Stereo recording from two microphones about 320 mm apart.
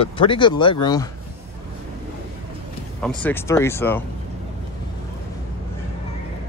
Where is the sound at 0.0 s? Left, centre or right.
Centre.